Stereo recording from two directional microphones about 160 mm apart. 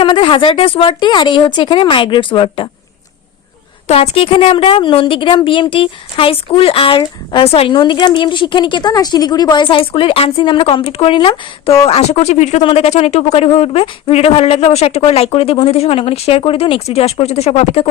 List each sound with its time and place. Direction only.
0.0 s a woman's voice: 30° left (ahead or behind)
3.8 s a woman's voice: 40° left (ahead or behind)